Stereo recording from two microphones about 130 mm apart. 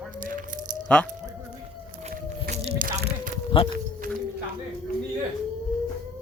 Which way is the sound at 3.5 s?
40° left (ahead or behind).